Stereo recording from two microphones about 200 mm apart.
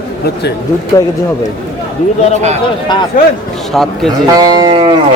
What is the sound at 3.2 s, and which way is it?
Speech, 45° left (ahead or behind).